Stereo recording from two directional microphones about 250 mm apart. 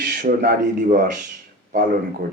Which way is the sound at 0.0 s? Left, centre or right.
Right.